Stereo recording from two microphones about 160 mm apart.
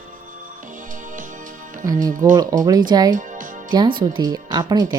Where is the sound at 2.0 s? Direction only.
55° right (ahead or behind).